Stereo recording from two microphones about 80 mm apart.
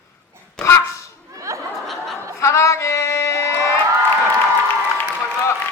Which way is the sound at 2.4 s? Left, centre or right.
Left.